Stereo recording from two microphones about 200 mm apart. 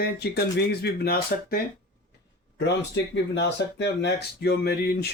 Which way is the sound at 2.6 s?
60° left (ahead or behind).